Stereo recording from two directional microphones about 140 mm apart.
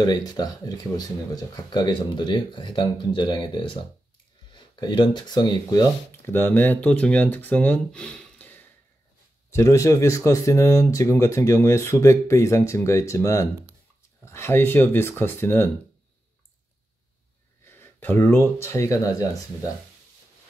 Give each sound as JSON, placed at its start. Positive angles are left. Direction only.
{"t": 0.0, "sound": "speech", "side_deg": 30}
{"t": 17.6, "sound": "speech", "side_deg": 15}